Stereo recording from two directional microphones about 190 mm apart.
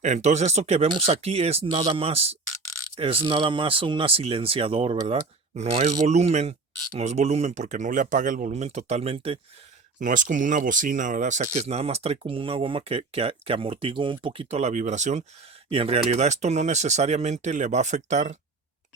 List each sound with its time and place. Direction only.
0.0 s speech: 35° right (ahead or behind)
10.0 s speech: 45° right (ahead or behind)